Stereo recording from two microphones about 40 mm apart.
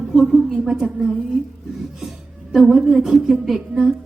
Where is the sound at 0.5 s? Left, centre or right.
Centre.